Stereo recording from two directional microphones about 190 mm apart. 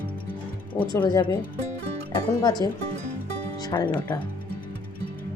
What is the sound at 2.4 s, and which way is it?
Speech, 20° left (ahead or behind).